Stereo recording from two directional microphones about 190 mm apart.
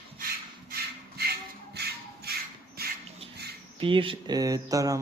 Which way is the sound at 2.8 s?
55° right (ahead or behind).